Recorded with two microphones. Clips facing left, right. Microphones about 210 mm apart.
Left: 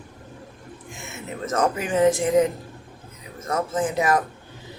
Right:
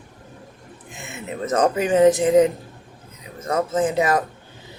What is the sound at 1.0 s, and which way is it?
Speech, 15° right (ahead or behind).